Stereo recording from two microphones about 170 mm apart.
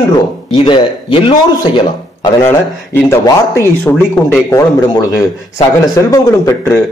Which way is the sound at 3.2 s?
15° left (ahead or behind).